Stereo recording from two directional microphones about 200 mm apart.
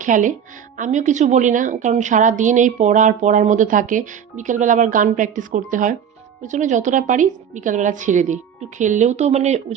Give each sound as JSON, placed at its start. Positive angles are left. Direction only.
{"t": 0.0, "sound": "a woman's voice", "side_deg": -40}